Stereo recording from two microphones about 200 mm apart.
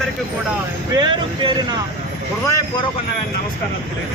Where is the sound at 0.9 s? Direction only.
20° right (ahead or behind).